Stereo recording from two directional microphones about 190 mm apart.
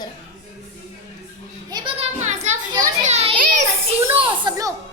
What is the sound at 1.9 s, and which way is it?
Music, 35° right (ahead or behind).